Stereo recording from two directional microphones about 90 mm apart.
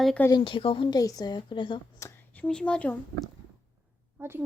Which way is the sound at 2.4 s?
10° left (ahead or behind).